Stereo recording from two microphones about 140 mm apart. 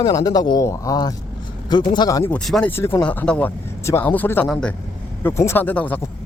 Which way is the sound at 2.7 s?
15° left (ahead or behind).